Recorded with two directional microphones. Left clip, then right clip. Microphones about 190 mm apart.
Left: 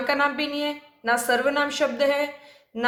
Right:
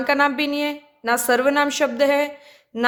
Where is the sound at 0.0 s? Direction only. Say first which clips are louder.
Right 4 dB; 35° right (ahead or behind).